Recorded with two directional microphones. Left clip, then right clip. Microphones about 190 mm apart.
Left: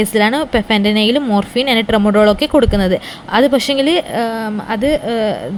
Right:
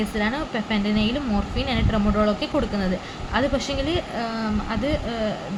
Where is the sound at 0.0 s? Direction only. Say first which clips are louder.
Left 12 dB; 55° left (ahead or behind).